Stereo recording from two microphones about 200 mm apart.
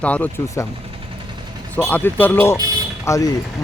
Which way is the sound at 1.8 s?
10° left (ahead or behind).